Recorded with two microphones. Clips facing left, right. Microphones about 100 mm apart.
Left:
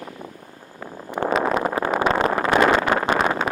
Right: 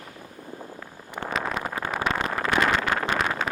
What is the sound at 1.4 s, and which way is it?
Vehicle, 35° left (ahead or behind).